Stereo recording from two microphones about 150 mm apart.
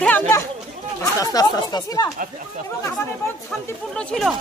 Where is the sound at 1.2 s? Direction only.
25° left (ahead or behind).